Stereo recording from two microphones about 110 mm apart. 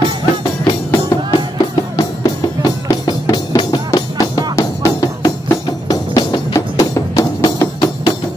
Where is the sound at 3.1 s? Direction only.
40° left (ahead or behind).